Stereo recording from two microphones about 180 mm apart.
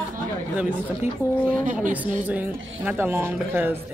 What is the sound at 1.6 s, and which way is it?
Speech, 45° right (ahead or behind).